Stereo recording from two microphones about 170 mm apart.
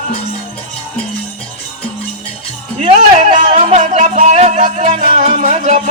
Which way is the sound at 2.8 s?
45° right (ahead or behind).